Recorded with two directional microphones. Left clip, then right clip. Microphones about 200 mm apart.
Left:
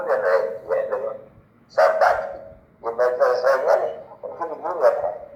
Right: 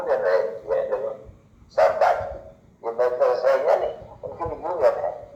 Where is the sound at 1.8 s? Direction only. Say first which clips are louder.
Left 2 dB; 15° right (ahead or behind).